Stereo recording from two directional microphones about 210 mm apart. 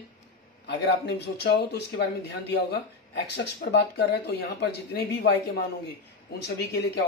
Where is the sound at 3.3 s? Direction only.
55° left (ahead or behind).